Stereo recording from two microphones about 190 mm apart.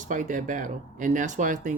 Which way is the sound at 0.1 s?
40° right (ahead or behind).